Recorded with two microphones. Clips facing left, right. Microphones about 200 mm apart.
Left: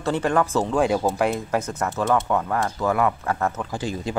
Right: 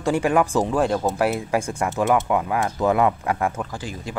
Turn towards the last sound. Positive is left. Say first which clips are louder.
# left 4 dB
turn(degrees=25)  # may be behind; listen again after turning